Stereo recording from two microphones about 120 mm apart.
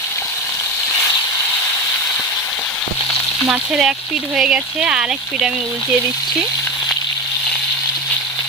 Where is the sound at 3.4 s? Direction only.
10° right (ahead or behind).